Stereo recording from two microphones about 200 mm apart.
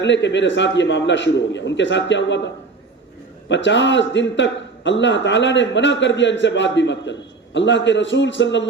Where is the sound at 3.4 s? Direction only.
65° left (ahead or behind).